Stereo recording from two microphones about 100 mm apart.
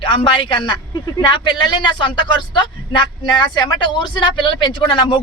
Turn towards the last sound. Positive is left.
turn(degrees=55)  # may be behind; listen again after turning